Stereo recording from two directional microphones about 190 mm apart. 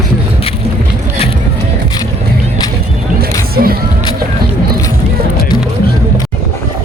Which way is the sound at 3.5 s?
50° right (ahead or behind).